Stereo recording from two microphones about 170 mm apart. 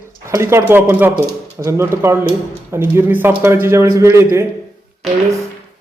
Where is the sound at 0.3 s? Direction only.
15° right (ahead or behind).